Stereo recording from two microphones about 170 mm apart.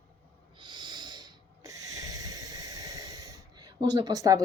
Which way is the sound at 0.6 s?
25° right (ahead or behind).